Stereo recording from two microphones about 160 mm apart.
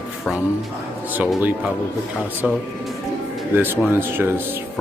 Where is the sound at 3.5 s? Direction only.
15° right (ahead or behind).